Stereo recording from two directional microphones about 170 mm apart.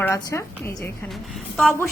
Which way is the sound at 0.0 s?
15° left (ahead or behind).